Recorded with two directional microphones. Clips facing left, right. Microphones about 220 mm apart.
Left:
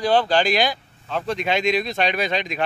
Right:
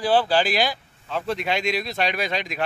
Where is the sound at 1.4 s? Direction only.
20° left (ahead or behind).